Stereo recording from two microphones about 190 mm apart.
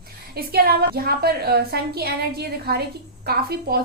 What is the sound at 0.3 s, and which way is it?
A woman's voice, 55° right (ahead or behind).